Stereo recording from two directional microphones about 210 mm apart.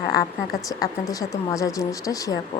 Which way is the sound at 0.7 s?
15° left (ahead or behind).